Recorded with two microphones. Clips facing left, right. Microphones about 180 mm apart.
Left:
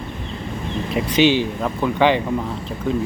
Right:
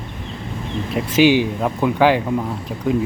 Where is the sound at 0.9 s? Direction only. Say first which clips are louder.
Right 2 dB; 5° right (ahead or behind).